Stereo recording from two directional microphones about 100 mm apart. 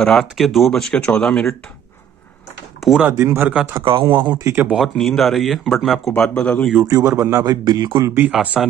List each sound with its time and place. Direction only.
0.0 s speech: 5° left (ahead or behind)
3.1 s speech: 25° right (ahead or behind)
3.8 s speech: 60° right (ahead or behind)
4.4 s speech: 25° right (ahead or behind)
4.6 s speech: centre (ahead or behind)
6.1 s speech: 10° left (ahead or behind)
6.8 s a man's voice: 35° right (ahead or behind)
7.4 s a man's voice: 40° right (ahead or behind)
8.3 s speech: 15° right (ahead or behind)